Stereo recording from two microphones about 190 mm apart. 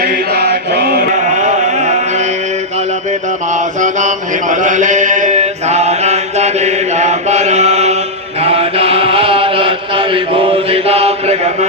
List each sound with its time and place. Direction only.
0.0 s chant: 50° right (ahead or behind)
1.1 s a sound: 40° right (ahead or behind)
2.7 s mantra: 40° right (ahead or behind)